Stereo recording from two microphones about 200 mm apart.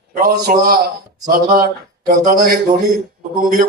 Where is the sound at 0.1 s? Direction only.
45° right (ahead or behind).